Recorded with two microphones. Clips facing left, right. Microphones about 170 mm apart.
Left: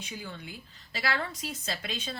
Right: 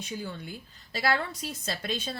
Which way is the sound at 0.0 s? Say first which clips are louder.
Right 4 dB; 40° right (ahead or behind).